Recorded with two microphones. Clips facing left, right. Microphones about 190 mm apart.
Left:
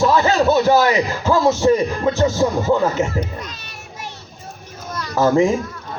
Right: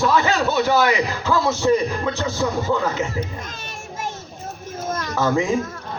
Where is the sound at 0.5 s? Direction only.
40° left (ahead or behind).